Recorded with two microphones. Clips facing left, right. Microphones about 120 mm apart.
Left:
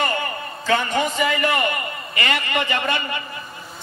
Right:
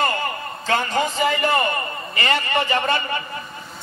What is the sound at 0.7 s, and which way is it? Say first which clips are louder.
A man's voice: left 1 dB; 35° right (ahead or behind).